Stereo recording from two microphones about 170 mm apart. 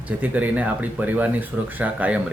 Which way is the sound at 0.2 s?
10° right (ahead or behind).